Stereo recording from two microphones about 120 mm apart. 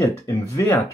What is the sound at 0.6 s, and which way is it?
Speech, 30° left (ahead or behind).